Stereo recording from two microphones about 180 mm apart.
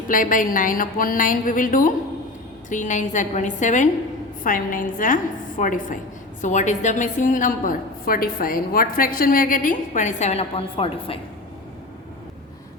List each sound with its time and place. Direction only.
0.1 s a woman's voice: 50° left (ahead or behind); by 11.2 s 30° left (ahead or behind)